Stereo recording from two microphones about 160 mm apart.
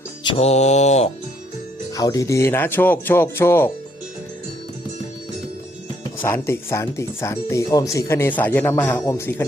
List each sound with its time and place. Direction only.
0.3 s mantra: 40° left (ahead or behind)
1.9 s speech: 20° left (ahead or behind)
6.0 s speech: 15° left (ahead or behind)